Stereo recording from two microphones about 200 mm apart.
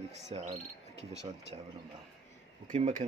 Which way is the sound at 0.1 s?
30° right (ahead or behind).